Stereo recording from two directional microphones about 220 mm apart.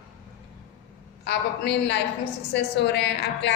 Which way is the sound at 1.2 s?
50° left (ahead or behind).